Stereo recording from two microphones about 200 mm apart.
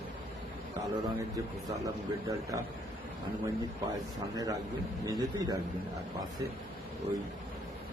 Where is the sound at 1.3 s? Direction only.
15° right (ahead or behind).